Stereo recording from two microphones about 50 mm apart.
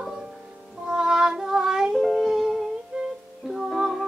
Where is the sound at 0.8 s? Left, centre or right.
Centre.